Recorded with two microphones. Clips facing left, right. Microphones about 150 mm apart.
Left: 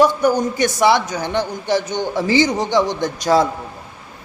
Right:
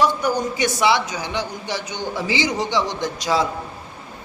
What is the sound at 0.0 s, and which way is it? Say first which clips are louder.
A man's voice: left 5 dB; 50° left (ahead or behind).